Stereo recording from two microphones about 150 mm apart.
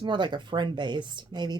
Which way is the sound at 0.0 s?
30° right (ahead or behind).